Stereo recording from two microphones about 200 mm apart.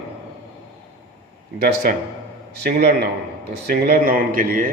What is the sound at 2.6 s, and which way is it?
Speech, 50° right (ahead or behind).